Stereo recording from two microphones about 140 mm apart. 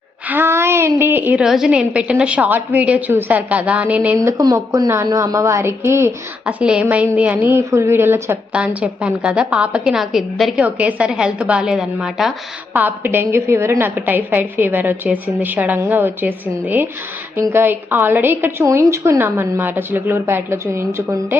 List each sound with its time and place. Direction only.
0.3 s a woman's voice: 15° right (ahead or behind)
4.2 s a woman's voice: 25° right (ahead or behind); by 12.3 s 5° right (ahead or behind)
12.7 s a woman's voice: 15° right (ahead or behind)